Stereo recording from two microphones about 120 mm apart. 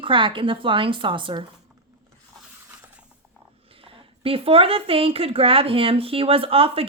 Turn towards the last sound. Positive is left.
turn(degrees=-50)  # may be behind; listen again after turning